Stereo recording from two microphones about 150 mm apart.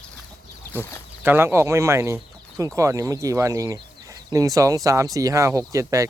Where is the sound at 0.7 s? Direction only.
15° left (ahead or behind).